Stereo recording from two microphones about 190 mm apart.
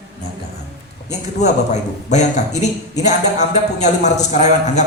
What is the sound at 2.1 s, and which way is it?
A man's voice, 40° left (ahead or behind).